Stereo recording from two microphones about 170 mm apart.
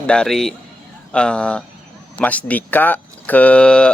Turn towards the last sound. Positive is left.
turn(degrees=5)  # may be behind; listen again after turning